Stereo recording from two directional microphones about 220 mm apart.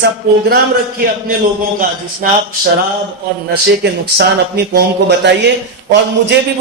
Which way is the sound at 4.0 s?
50° right (ahead or behind).